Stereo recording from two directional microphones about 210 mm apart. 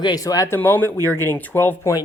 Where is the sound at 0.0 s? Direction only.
20° left (ahead or behind).